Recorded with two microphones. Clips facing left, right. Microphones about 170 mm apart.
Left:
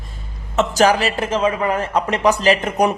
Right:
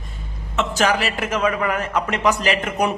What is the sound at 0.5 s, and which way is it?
A man's voice, 35° left (ahead or behind).